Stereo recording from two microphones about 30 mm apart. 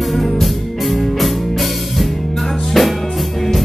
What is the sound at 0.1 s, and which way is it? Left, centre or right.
Music, centre.